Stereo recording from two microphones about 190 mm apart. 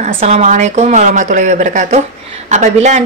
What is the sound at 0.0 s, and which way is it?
A woman's voice, 35° right (ahead or behind).